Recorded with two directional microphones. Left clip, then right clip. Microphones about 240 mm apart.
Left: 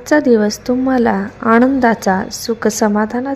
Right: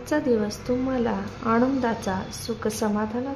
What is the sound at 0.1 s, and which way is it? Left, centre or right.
A woman's voice, left.